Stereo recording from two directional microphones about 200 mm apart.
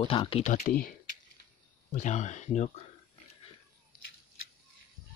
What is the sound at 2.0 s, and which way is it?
Speech, 35° left (ahead or behind).